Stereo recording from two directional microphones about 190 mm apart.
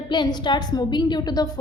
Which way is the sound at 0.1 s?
25° left (ahead or behind).